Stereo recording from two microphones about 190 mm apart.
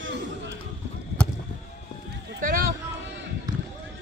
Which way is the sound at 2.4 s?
45° right (ahead or behind).